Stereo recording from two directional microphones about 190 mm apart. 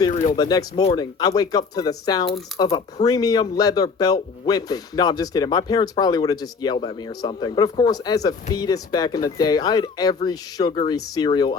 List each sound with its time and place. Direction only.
0.1 s speech: 40° left (ahead or behind)
0.3 s speech: 20° left (ahead or behind)